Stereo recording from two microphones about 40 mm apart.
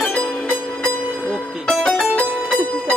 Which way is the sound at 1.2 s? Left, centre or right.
Left.